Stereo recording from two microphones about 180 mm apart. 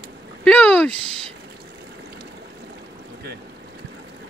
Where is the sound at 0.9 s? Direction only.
35° right (ahead or behind).